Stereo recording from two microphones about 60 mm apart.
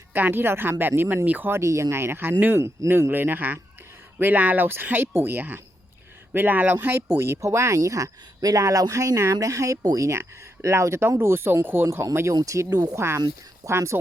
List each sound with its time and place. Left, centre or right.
0.1 s speech: right
1.5 s speech: right
2.6 s speech: right
3.1 s speech: right
7.2 s speech: right
10.1 s speech: right
12.3 s speech: right
12.7 s speech: right
13.0 s speech: right